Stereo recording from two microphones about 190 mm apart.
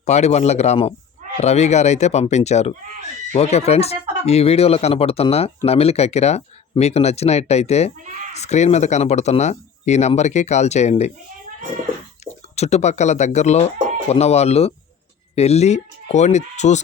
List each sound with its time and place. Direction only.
0.0 s speech: 35° left (ahead or behind)
12.2 s speech: 35° left (ahead or behind)